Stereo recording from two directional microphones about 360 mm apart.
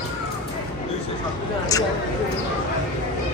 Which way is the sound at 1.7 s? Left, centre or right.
Centre.